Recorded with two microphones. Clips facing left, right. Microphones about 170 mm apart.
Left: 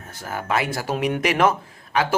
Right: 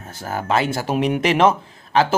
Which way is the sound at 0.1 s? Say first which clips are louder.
Right 4 dB; 30° right (ahead or behind).